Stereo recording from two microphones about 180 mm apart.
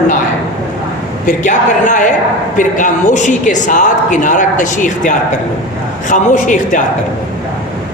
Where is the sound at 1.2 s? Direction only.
45° left (ahead or behind).